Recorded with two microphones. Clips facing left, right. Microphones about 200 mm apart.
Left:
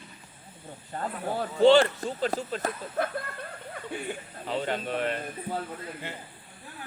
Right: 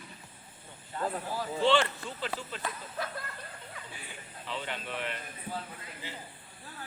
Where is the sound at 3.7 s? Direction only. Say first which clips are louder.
Left 12 dB; 55° left (ahead or behind).